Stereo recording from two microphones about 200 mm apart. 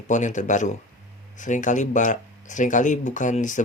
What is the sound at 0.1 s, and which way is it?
Speech, 40° left (ahead or behind).